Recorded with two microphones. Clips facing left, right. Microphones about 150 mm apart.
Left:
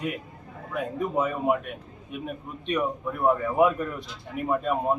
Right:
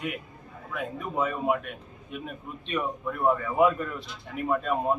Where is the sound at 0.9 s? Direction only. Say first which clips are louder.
Left 3 dB; 15° left (ahead or behind).